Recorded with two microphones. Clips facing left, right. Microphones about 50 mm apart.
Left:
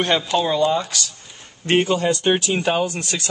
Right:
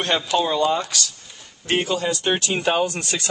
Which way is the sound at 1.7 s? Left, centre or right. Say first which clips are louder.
Left 4 dB; left.